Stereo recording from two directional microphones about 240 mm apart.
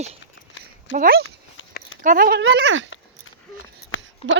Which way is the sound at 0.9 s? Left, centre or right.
Right.